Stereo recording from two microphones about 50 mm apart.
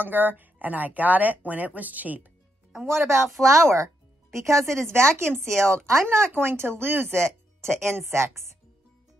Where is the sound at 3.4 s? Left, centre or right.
Right.